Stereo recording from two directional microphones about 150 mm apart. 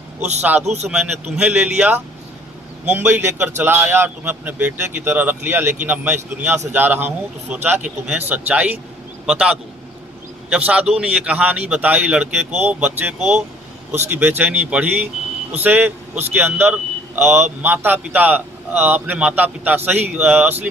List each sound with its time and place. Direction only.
0.2 s a man's voice: 50° right (ahead or behind)
1.4 s a man's voice: 10° right (ahead or behind)